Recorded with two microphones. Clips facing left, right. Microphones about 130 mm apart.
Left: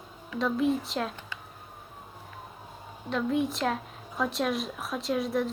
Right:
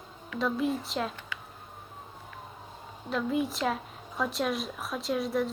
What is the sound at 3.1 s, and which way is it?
Speech, centre (ahead or behind).